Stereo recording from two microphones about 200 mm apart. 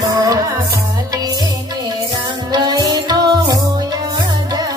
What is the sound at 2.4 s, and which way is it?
Music, 20° right (ahead or behind).